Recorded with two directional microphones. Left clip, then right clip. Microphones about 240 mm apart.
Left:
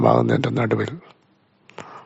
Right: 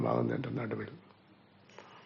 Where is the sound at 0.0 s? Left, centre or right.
Left.